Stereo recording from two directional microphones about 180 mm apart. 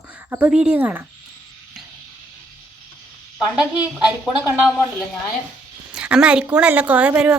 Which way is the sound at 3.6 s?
5° right (ahead or behind).